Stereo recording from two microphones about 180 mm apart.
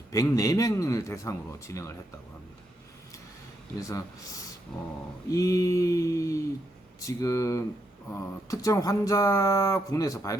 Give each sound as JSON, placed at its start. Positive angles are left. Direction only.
{"t": 0.1, "sound": "a man's voice", "side_deg": 20}
{"t": 3.8, "sound": "a man's voice", "side_deg": 20}